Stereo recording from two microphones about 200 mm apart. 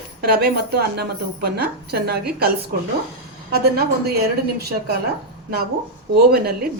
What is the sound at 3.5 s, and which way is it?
A woman's voice, 50° right (ahead or behind).